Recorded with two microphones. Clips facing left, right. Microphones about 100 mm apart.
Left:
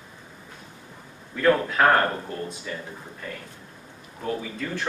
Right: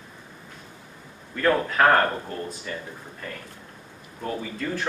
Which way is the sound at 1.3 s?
Centre (ahead or behind).